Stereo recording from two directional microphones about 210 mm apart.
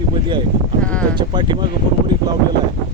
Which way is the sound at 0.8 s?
5° left (ahead or behind).